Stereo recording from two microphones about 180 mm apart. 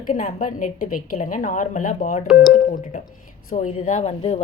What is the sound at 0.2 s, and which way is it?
A woman's voice, 50° left (ahead or behind).